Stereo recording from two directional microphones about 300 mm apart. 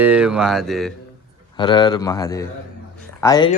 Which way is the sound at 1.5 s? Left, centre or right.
Centre.